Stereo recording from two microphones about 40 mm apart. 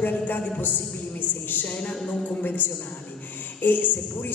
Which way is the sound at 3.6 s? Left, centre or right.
Left.